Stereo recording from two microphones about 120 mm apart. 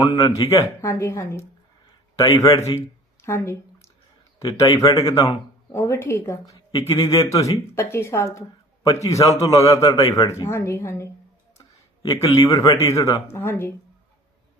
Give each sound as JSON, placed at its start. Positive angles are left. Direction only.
{"t": 0.0, "sound": "speech", "side_deg": 40}
{"t": 0.8, "sound": "speech", "side_deg": 25}